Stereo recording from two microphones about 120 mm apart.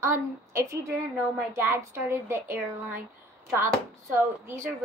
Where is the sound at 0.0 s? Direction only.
25° right (ahead or behind).